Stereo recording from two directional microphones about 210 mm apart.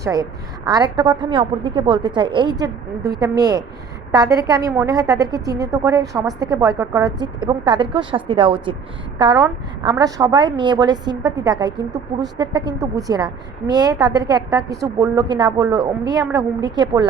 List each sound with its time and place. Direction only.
0.0 s a woman's voice: 15° right (ahead or behind)